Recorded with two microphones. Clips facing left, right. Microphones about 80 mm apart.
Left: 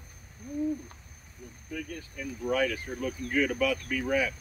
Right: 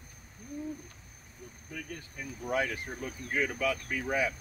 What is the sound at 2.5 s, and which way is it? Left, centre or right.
Speech, right.